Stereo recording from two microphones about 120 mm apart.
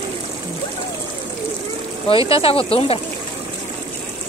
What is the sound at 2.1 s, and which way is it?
Speech, 50° left (ahead or behind).